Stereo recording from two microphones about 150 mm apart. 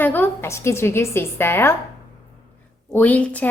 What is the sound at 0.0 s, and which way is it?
A woman's voice, 15° left (ahead or behind).